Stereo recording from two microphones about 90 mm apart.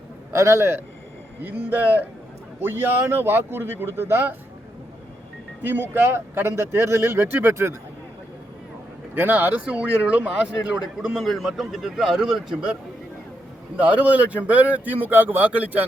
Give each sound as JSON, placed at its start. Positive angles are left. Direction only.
{"t": 0.3, "sound": "a man's voice", "side_deg": -30}
{"t": 1.7, "sound": "speech", "side_deg": -20}
{"t": 5.6, "sound": "speech", "side_deg": -20}
{"t": 9.1, "sound": "speech", "side_deg": -20}
{"t": 10.9, "sound": "a man's voice", "side_deg": 0}
{"t": 13.7, "sound": "speech", "side_deg": -15}